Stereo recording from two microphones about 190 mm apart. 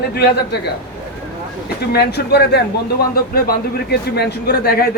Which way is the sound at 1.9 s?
60° left (ahead or behind).